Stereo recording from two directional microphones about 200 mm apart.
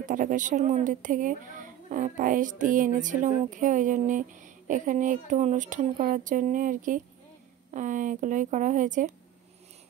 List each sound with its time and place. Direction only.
0.0 s a woman's voice: 40° right (ahead or behind)